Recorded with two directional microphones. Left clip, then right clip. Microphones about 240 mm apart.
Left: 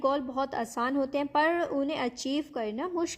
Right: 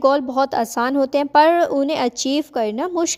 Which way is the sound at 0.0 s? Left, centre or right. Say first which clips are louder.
Right 12 dB; right.